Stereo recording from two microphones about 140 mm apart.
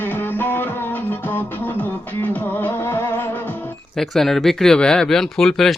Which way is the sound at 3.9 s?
Centre (ahead or behind).